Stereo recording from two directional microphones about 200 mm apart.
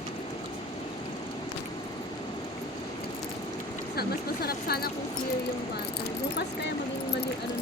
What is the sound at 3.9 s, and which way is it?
Speech, 50° left (ahead or behind).